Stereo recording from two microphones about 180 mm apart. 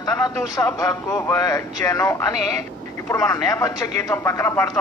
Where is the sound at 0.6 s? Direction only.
20° left (ahead or behind).